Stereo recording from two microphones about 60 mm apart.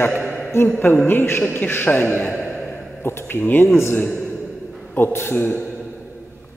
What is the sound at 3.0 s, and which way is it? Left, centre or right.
A man's voice, left.